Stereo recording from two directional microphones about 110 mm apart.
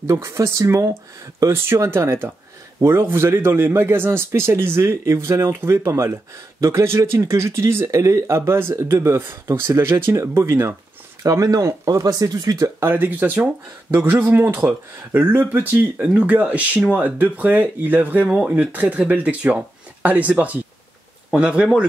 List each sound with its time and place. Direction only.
0.0 s speech: 25° right (ahead or behind); by 21.8 s 10° right (ahead or behind)